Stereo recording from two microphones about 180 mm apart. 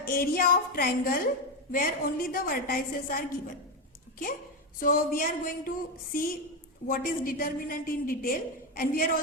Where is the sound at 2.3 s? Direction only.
55° left (ahead or behind).